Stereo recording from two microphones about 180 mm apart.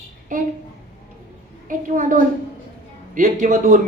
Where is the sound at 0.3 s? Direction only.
45° right (ahead or behind).